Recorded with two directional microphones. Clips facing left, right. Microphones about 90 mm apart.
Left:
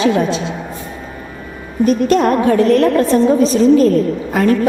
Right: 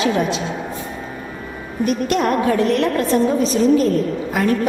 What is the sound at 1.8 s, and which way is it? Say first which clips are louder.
A woman's voice: left 6 dB; 35° left (ahead or behind).